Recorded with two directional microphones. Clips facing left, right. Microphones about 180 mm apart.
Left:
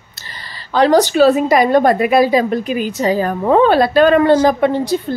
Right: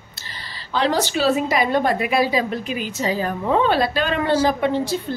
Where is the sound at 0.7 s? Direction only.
45° left (ahead or behind).